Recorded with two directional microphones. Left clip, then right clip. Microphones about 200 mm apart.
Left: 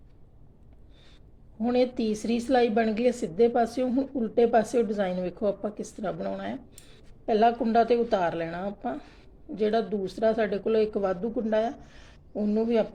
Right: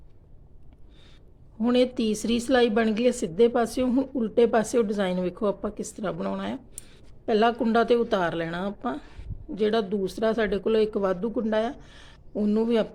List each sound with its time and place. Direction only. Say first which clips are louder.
1.6 s a woman's voice: right 2 dB; 20° right (ahead or behind)